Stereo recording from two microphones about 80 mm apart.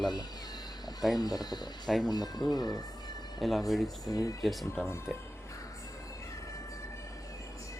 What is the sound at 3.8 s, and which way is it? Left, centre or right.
Speech, left.